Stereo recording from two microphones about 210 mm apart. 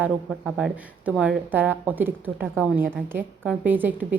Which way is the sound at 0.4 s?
5° right (ahead or behind).